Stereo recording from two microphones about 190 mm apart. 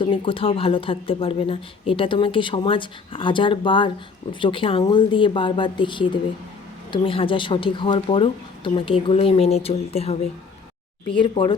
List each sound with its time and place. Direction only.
0.0 s speech: 25° left (ahead or behind)